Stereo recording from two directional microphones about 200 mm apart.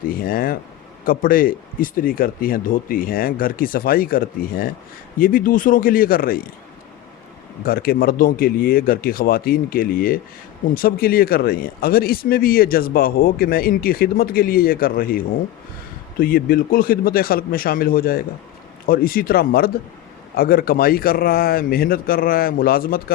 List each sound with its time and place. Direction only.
0.1 s speech: 45° left (ahead or behind)
7.6 s speech: 45° left (ahead or behind)